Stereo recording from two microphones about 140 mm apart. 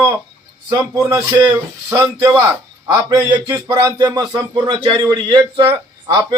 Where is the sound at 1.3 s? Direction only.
25° right (ahead or behind).